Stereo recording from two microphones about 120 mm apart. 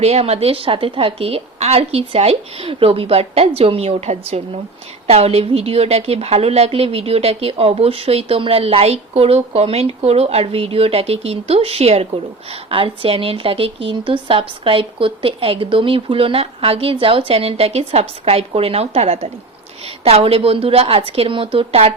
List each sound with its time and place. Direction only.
0.0 s a woman's voice: 60° right (ahead or behind)